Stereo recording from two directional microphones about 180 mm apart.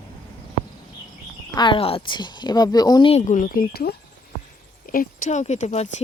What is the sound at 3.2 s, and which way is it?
Speech, 45° left (ahead or behind).